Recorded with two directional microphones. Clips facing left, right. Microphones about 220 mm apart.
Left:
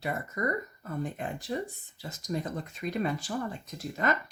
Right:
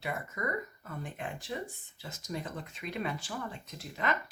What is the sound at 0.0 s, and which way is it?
Speech, 40° left (ahead or behind).